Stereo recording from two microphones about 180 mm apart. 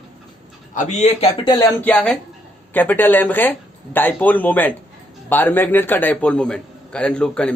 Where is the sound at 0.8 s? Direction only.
40° left (ahead or behind).